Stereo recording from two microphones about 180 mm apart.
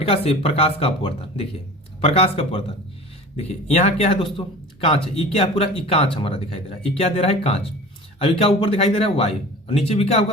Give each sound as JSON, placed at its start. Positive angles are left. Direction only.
{"t": 0.0, "sound": "speech", "side_deg": 35}